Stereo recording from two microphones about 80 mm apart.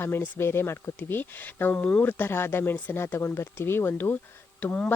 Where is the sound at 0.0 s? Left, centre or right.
Left.